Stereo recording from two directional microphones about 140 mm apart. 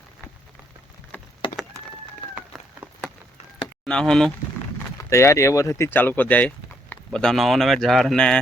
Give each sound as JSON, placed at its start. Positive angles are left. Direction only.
{"t": 1.1, "sound": "a sound", "side_deg": 15}
{"t": 3.8, "sound": "speech", "side_deg": 5}
{"t": 4.9, "sound": "speech", "side_deg": 20}